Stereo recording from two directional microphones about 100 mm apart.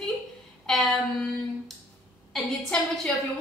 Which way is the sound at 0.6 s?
5° left (ahead or behind).